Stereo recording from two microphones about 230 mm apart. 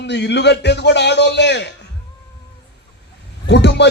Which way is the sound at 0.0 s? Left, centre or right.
Left.